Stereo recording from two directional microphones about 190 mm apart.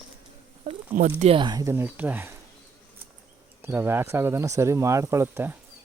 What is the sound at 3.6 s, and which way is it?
Speech, 10° right (ahead or behind).